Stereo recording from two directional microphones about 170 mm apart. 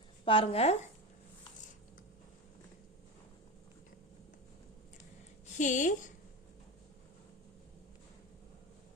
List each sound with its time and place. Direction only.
0.3 s speech: 35° left (ahead or behind)
5.5 s speech: 45° left (ahead or behind)